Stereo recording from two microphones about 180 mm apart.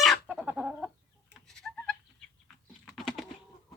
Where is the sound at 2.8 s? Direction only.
Centre (ahead or behind).